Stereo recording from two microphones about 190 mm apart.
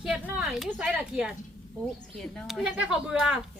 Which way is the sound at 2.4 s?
5° right (ahead or behind).